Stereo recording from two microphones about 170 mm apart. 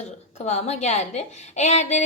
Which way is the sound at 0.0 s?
40° left (ahead or behind).